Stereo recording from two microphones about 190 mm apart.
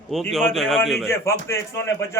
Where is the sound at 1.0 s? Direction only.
15° left (ahead or behind).